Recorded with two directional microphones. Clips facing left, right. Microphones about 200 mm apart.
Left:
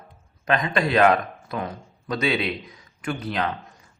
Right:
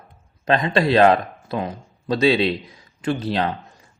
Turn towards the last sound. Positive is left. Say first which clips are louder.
# right 5 dB
turn(degrees=-30)  # may be behind; listen again after turning